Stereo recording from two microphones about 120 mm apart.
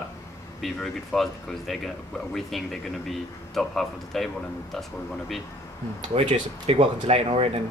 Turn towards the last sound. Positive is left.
turn(degrees=-55)  # may be behind; listen again after turning